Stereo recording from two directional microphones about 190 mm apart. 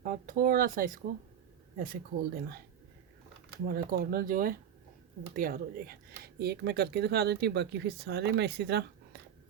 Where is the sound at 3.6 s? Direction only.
55° right (ahead or behind).